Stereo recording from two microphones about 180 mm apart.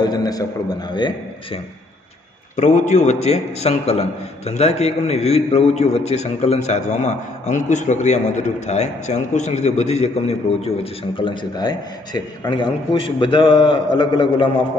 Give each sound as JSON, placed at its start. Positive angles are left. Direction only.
{"t": 0.0, "sound": "a man's voice", "side_deg": 20}
{"t": 2.5, "sound": "a man's voice", "side_deg": 40}